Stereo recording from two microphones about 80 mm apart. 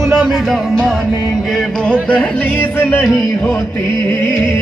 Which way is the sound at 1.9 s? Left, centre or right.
Centre.